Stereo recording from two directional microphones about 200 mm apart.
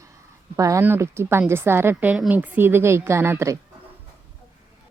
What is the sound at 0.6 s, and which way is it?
A woman's voice, 15° right (ahead or behind).